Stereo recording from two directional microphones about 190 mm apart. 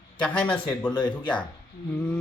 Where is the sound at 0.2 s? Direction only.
10° left (ahead or behind).